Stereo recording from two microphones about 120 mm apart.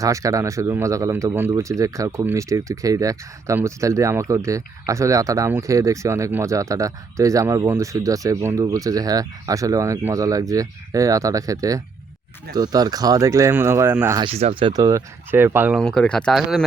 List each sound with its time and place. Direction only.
0.0 s speech: 25° right (ahead or behind)
14.5 s speech: 40° right (ahead or behind)
15.3 s speech: 20° right (ahead or behind)
15.8 s speech: 5° left (ahead or behind)